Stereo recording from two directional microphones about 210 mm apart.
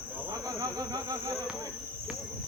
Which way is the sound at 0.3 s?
15° right (ahead or behind).